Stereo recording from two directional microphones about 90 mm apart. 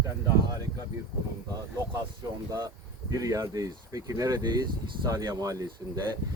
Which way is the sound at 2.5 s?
40° right (ahead or behind).